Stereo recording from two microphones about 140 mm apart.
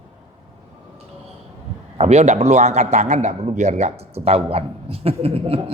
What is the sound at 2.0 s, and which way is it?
A man's voice, 50° right (ahead or behind).